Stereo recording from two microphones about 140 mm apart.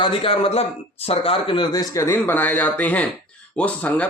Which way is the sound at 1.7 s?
25° left (ahead or behind).